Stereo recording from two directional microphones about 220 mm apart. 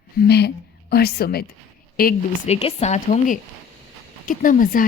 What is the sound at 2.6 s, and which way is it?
A woman's voice, 30° left (ahead or behind).